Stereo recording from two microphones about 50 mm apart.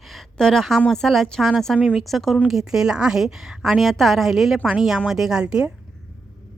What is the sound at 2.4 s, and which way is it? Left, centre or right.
A woman's voice, centre.